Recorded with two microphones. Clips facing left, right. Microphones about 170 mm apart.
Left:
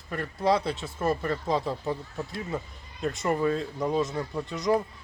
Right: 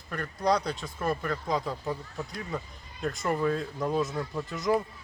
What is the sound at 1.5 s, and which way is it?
Speech, 25° left (ahead or behind).